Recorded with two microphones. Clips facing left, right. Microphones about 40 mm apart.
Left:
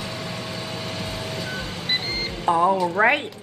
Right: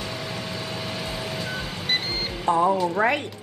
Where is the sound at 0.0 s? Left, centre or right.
Centre.